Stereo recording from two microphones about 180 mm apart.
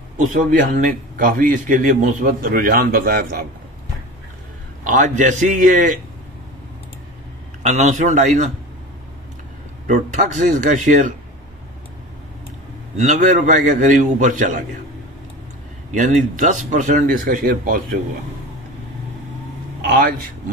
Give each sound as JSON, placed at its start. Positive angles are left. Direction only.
{"t": 0.3, "sound": "a man's voice", "side_deg": -45}
{"t": 4.8, "sound": "a man's voice", "side_deg": -45}
{"t": 7.6, "sound": "a man's voice", "side_deg": -40}
{"t": 9.8, "sound": "a man's voice", "side_deg": -45}
{"t": 12.9, "sound": "a man's voice", "side_deg": -40}
{"t": 15.9, "sound": "a man's voice", "side_deg": -45}
{"t": 19.9, "sound": "a man's voice", "side_deg": -55}